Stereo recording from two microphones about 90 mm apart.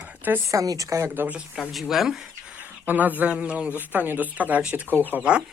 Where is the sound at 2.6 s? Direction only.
20° right (ahead or behind).